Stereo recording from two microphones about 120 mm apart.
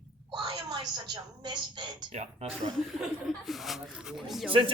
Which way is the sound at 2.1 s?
65° right (ahead or behind).